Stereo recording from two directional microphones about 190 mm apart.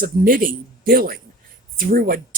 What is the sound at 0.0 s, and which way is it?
Speech, 50° right (ahead or behind).